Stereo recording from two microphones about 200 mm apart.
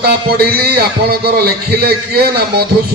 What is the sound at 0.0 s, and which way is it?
A man's voice, 50° right (ahead or behind).